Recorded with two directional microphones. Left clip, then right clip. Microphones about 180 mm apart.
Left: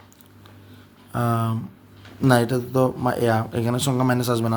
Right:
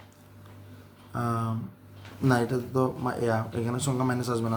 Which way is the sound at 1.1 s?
45° left (ahead or behind).